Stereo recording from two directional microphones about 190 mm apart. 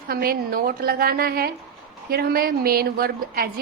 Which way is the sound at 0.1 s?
50° right (ahead or behind).